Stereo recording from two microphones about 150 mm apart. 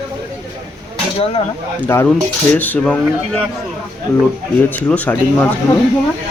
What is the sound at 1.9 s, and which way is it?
Speech, 20° left (ahead or behind).